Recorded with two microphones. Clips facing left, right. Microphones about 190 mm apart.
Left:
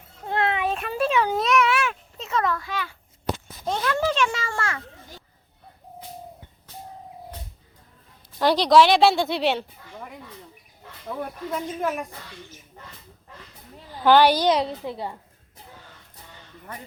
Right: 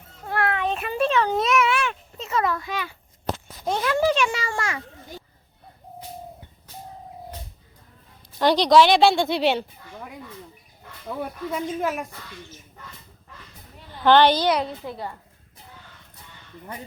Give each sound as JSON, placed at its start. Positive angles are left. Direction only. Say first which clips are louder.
{"t": 0.3, "sound": "a sound", "louder": "left 1 dB", "side_deg": 20}
{"t": 0.6, "sound": "a child's voice", "louder": "right 1 dB", "side_deg": 0}
{"t": 8.4, "sound": "a woman's voice", "louder": "right 1 dB", "side_deg": 0}
{"t": 11.2, "sound": "a woman's voice", "louder": "right 2 dB", "side_deg": -5}
{"t": 14.0, "sound": "a child's voice", "louder": "even", "side_deg": 10}